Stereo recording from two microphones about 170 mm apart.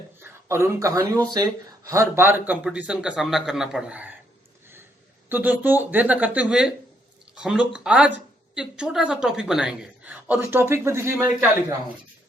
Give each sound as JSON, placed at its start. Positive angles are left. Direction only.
{"t": 0.2, "sound": "a woman's voice", "side_deg": -15}
{"t": 5.3, "sound": "a woman's voice", "side_deg": -10}